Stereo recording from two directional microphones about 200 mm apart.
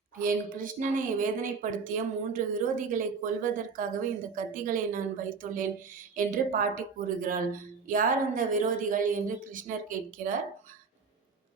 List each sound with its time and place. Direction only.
0.2 s a woman's voice: 45° right (ahead or behind)